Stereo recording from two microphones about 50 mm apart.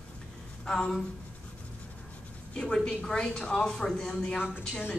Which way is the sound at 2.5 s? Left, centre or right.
Centre.